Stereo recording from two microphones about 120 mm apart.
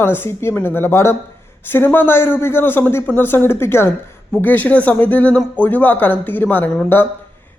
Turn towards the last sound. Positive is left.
turn(degrees=15)  # may be behind; listen again after turning